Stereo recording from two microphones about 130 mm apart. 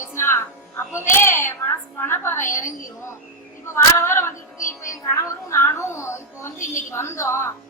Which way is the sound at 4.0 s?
20° left (ahead or behind).